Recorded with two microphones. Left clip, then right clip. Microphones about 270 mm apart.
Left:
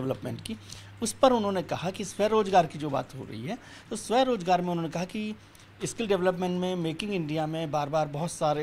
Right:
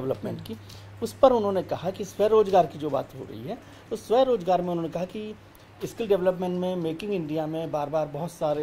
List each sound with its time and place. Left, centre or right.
0.0 s speech: left
5.8 s speech: left